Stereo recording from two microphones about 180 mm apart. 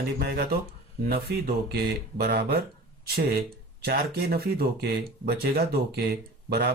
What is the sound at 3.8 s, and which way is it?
Speech, 55° right (ahead or behind).